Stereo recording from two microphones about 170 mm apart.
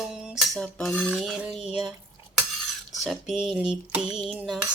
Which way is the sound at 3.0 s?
Centre (ahead or behind).